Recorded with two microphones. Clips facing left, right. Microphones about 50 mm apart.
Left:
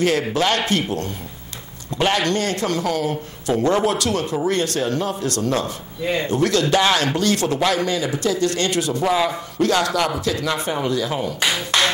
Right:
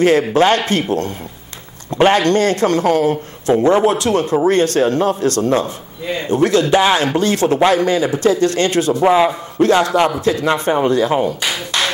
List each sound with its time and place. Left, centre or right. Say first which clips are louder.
0.0 s a man's voice: right 7 dB; right
6.2 s a man's voice: right 7 dB; right
11.4 s speech: even; left